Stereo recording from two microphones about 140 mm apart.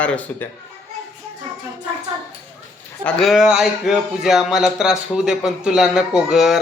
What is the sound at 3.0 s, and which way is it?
A man's voice, centre (ahead or behind).